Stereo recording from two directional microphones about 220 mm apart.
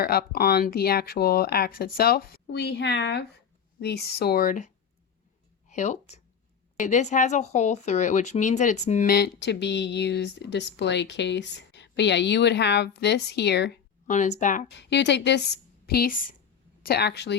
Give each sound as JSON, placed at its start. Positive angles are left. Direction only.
{"t": 0.0, "sound": "a woman's voice", "side_deg": 45}
{"t": 14.1, "sound": "speech", "side_deg": 35}
{"t": 14.7, "sound": "a woman's voice", "side_deg": 50}